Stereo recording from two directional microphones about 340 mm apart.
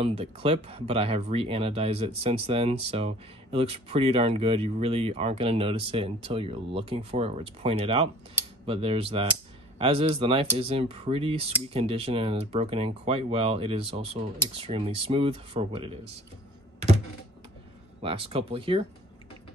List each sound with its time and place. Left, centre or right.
0.0 s speech: centre
18.0 s speech: centre